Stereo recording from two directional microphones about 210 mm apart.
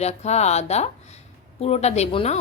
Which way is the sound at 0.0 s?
30° left (ahead or behind).